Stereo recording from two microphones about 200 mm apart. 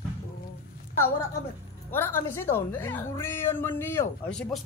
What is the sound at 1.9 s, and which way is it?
A woman's voice, 10° left (ahead or behind).